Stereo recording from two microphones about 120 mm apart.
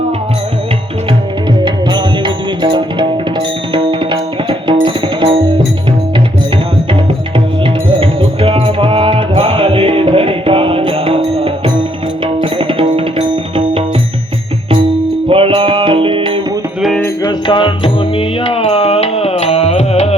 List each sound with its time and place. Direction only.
1.6 s music: 40° right (ahead or behind)
7.3 s music: 45° right (ahead or behind)
15.3 s music: 50° right (ahead or behind)
17.2 s music: 40° left (ahead or behind); by 20.1 s 60° left (ahead or behind)